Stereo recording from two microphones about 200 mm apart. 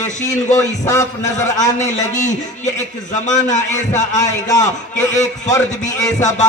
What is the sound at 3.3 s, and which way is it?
Speech, 35° left (ahead or behind).